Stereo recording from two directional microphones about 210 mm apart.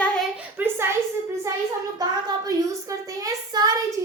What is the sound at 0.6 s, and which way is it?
Speech, 10° right (ahead or behind).